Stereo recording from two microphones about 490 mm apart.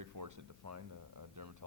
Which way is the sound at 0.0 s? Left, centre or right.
Right.